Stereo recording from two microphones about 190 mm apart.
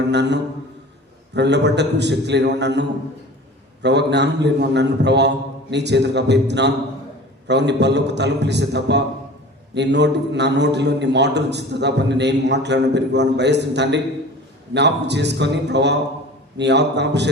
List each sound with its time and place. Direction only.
0.1 s a man's voice: 65° right (ahead or behind)
3.8 s a man's voice: 65° right (ahead or behind)